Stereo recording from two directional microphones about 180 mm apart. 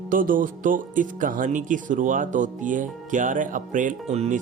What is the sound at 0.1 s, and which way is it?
Speech, 50° right (ahead or behind).